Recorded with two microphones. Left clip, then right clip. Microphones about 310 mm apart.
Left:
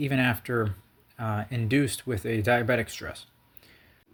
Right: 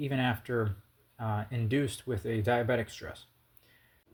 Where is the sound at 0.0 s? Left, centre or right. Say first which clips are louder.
Left 6 dB; left.